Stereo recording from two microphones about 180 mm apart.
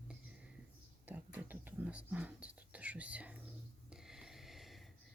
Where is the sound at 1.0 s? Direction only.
10° right (ahead or behind).